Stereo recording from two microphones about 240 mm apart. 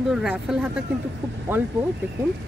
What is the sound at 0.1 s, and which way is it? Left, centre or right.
Speech, centre.